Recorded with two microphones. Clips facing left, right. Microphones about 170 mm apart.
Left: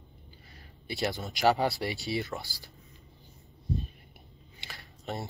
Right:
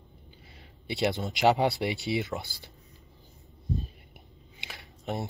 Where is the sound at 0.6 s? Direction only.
20° right (ahead or behind).